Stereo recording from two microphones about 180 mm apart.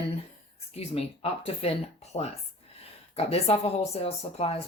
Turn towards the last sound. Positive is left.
turn(degrees=35)  # may be behind; listen again after turning